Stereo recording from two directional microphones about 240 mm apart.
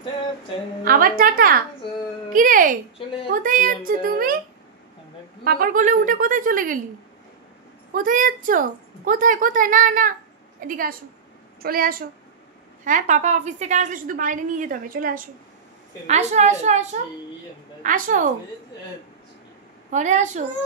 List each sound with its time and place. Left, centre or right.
0.8 s a woman's voice: right
5.4 s a woman's voice: right
7.9 s a woman's voice: right
19.9 s a woman's voice: right